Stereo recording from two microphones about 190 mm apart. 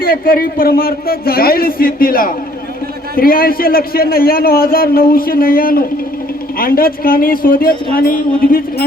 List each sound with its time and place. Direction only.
0.0 s a man's voice: 50° left (ahead or behind)